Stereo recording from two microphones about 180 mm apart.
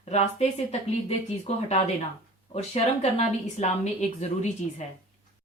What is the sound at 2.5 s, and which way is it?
A woman's voice, 35° left (ahead or behind).